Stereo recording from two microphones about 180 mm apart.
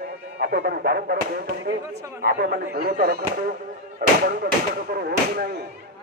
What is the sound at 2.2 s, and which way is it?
Speech, 55° right (ahead or behind).